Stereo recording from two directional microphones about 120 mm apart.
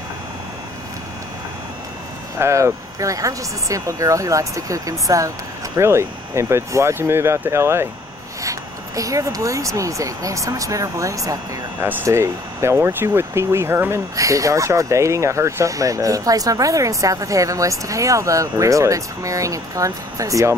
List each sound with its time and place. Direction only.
2.3 s speech: 25° right (ahead or behind)